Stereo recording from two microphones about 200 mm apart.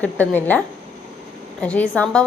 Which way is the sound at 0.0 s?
10° left (ahead or behind).